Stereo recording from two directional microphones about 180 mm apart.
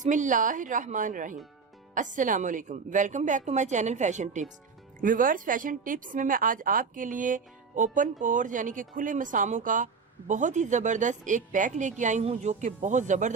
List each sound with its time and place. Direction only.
0.0 s speech: 45° right (ahead or behind)